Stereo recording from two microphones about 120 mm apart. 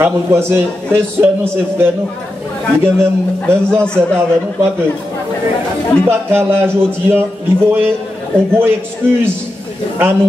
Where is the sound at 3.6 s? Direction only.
10° left (ahead or behind).